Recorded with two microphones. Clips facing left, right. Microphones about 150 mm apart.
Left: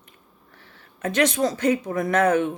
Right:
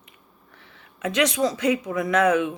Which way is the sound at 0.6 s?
40° left (ahead or behind).